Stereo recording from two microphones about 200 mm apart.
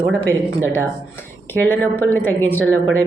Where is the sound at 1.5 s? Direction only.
10° left (ahead or behind).